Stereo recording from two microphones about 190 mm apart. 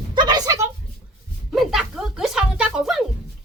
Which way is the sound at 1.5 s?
Centre (ahead or behind).